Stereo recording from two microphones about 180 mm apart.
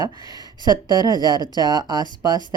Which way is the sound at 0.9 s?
20° right (ahead or behind).